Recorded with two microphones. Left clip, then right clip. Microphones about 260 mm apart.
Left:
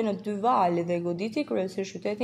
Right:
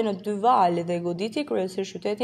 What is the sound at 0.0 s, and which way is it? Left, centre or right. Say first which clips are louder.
A woman's voice: right 4 dB; right.